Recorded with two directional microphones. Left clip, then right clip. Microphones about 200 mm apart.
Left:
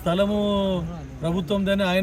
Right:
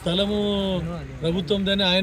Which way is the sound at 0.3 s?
30° left (ahead or behind).